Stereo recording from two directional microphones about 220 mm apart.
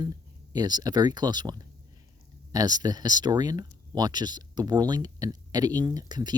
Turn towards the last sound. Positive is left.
turn(degrees=-20)  # may be behind; listen again after turning